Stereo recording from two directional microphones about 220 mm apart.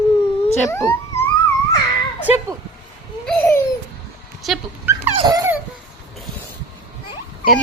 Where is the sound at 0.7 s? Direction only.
10° left (ahead or behind).